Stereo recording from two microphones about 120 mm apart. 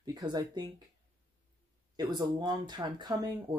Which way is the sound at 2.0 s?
35° right (ahead or behind).